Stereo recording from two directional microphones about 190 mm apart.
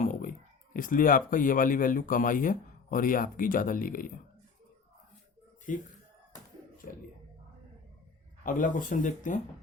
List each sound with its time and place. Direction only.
0.0 s speech: 45° left (ahead or behind)
5.7 s speech: 45° left (ahead or behind)
8.4 s speech: 45° left (ahead or behind)